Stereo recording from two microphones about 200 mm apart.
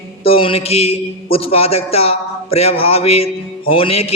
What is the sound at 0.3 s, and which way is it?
A man's voice, 25° left (ahead or behind).